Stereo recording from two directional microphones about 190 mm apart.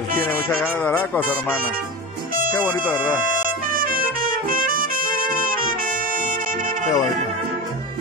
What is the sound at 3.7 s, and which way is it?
Music, 50° right (ahead or behind).